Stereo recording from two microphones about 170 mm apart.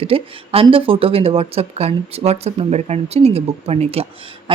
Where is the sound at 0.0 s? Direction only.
35° right (ahead or behind).